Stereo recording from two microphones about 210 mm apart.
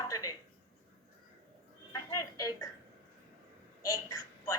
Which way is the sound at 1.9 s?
15° left (ahead or behind).